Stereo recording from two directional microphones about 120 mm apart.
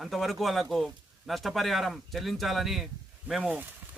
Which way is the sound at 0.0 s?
Centre (ahead or behind).